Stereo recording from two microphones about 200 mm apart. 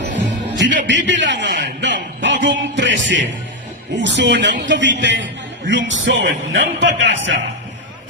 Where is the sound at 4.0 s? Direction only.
60° right (ahead or behind).